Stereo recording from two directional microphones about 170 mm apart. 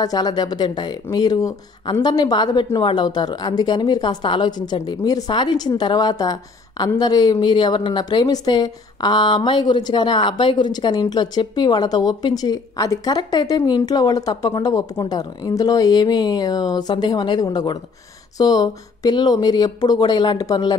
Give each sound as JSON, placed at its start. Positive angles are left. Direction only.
{"t": 0.0, "sound": "a woman's voice", "side_deg": 25}